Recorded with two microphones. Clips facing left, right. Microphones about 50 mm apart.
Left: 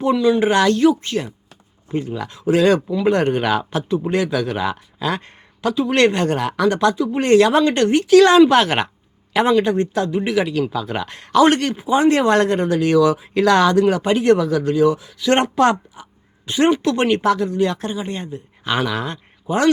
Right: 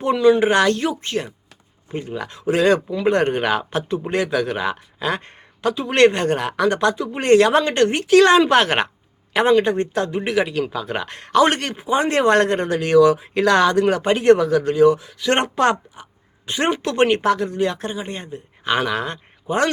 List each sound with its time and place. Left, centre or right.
0.0 s speech: right
17.7 s speech: right